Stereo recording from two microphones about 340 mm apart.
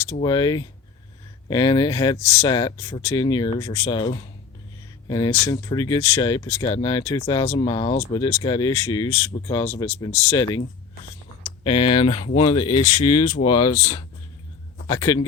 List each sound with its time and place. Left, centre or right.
0.1 s speech: centre
11.6 s speech: centre